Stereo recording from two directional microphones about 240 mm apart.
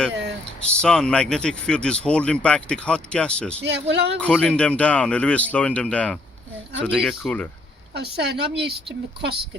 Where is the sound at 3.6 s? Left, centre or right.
Right.